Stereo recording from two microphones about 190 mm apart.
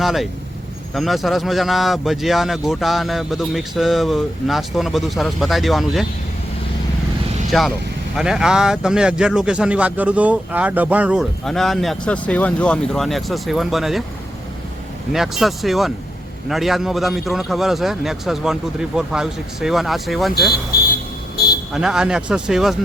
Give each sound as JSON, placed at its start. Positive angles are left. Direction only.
{"t": 0.0, "sound": "speech", "side_deg": 0}
{"t": 7.5, "sound": "speech", "side_deg": 0}
{"t": 15.1, "sound": "speech", "side_deg": 0}
{"t": 21.7, "sound": "speech", "side_deg": -5}